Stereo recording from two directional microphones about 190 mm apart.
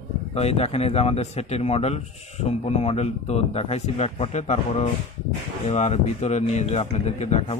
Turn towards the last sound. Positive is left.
turn(degrees=35)  # may be behind; listen again after turning